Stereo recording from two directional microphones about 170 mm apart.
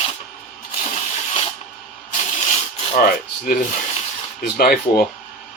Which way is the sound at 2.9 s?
55° left (ahead or behind).